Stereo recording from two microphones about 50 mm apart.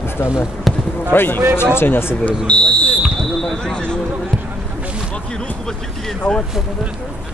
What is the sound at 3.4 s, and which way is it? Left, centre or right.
Basketball bounce, centre.